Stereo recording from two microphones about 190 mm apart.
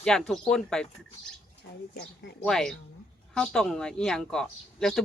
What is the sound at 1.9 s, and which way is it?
Speech, 65° left (ahead or behind).